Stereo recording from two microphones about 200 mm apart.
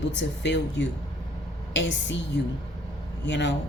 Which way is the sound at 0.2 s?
65° left (ahead or behind).